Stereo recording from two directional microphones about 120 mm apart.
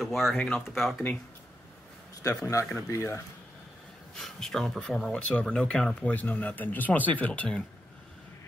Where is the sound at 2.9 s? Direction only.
25° left (ahead or behind).